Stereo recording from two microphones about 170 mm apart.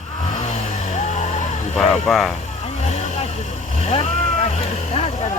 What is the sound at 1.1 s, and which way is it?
Music, 40° left (ahead or behind).